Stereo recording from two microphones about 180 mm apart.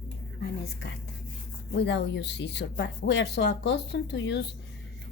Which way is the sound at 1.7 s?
75° left (ahead or behind).